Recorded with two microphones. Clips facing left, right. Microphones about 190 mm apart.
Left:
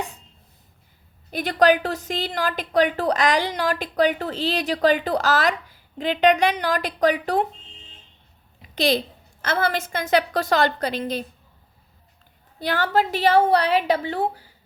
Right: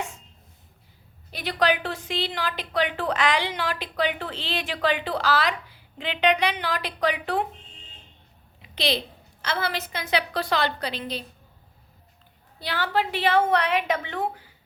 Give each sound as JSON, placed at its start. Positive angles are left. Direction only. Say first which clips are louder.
{"t": 1.3, "sound": "a woman's voice", "louder": "left 6 dB", "side_deg": 45}
{"t": 8.6, "sound": "a sound", "louder": "left 5 dB", "side_deg": 45}
{"t": 9.4, "sound": "a woman's voice", "louder": "left 5 dB", "side_deg": 50}
{"t": 12.5, "sound": "a woman's voice", "louder": "left 5 dB", "side_deg": 45}